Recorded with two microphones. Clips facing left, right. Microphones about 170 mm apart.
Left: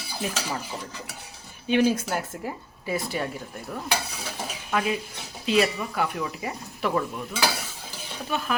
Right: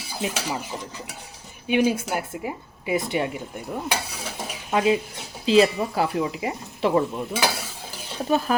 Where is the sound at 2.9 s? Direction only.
20° right (ahead or behind).